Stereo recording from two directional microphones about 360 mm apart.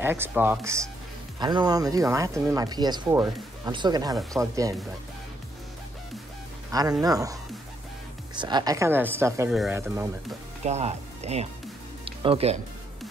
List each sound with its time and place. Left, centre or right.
0.0 s speech: centre
6.7 s speech: centre
8.4 s speech: centre
10.6 s speech: centre
12.0 s music: centre